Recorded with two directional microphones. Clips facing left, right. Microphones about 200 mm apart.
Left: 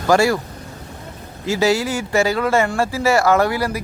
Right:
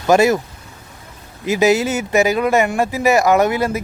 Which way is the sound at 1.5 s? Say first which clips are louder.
Right 3 dB; 20° right (ahead or behind).